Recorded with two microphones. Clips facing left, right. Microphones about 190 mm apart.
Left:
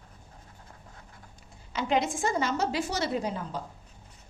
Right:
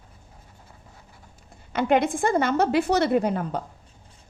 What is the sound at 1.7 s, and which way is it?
A woman's voice, 55° right (ahead or behind).